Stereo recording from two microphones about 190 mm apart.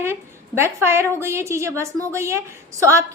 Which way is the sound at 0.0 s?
15° right (ahead or behind).